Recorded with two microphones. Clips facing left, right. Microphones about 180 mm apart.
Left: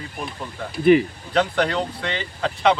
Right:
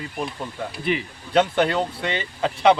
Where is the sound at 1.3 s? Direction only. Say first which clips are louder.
Right 2 dB; 25° right (ahead or behind).